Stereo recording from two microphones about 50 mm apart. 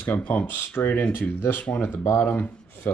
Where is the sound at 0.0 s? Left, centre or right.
Left.